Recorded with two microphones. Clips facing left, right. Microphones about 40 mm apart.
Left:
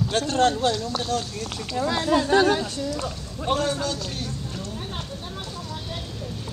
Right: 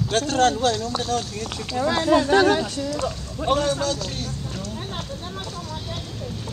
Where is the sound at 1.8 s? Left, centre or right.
Centre.